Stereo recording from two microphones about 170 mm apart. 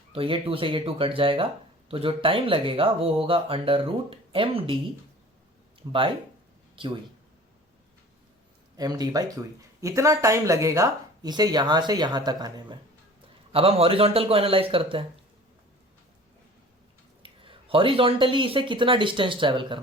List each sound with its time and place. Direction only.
0.1 s speech: 35° right (ahead or behind)
5.9 s speech: 30° right (ahead or behind)
8.7 s speech: 20° right (ahead or behind)
17.2 s speech: 30° right (ahead or behind)